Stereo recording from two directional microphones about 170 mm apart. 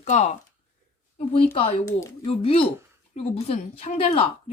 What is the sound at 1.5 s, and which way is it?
Speech, 30° left (ahead or behind).